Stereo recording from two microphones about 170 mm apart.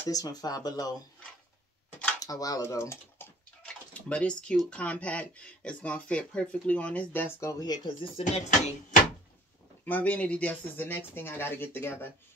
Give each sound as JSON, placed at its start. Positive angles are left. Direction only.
{"t": 0.1, "sound": "speech", "side_deg": 20}
{"t": 2.1, "sound": "speech", "side_deg": 20}
{"t": 7.3, "sound": "speech", "side_deg": 20}
{"t": 8.2, "sound": "speech", "side_deg": 45}
{"t": 9.8, "sound": "speech", "side_deg": 10}